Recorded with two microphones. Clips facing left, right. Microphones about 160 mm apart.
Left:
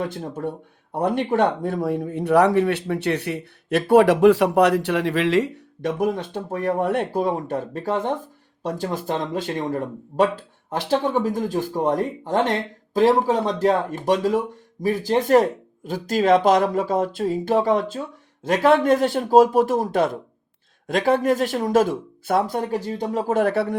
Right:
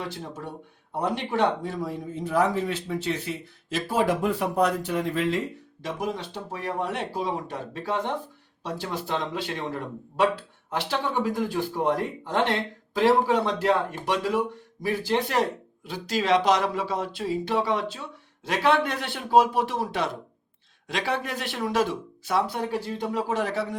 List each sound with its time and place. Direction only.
0.0 s speech: 50° left (ahead or behind); by 5.9 s 85° left
6.0 s speech: 55° left (ahead or behind)